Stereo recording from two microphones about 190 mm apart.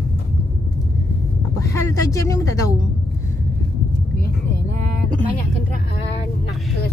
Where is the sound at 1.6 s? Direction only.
15° left (ahead or behind).